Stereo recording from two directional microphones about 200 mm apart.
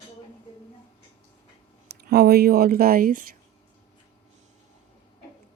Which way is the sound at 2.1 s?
50° right (ahead or behind).